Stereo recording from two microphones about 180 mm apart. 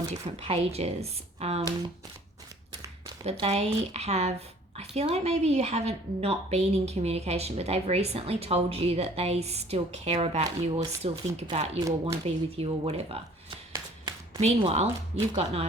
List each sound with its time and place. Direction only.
0.1 s speech: 35° right (ahead or behind)
3.2 s speech: 35° right (ahead or behind)